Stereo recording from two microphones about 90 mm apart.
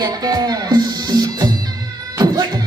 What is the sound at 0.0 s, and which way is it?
Music, 50° right (ahead or behind).